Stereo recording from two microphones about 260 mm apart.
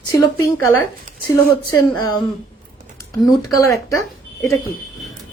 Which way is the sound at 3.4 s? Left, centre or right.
Centre.